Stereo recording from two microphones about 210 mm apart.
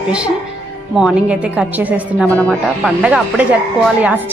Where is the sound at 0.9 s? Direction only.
5° right (ahead or behind).